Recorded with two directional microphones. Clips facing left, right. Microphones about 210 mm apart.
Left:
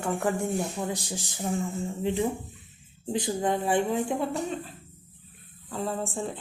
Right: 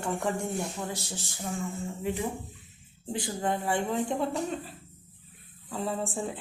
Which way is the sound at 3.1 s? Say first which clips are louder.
Left 4 dB; 20° left (ahead or behind).